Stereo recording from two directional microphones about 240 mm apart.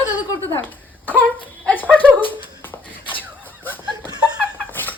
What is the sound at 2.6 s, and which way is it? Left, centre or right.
Beatboxing, centre.